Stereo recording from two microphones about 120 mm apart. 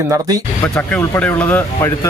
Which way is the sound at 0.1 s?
30° right (ahead or behind).